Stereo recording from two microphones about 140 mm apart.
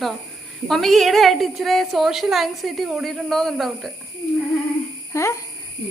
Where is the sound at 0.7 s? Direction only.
Centre (ahead or behind).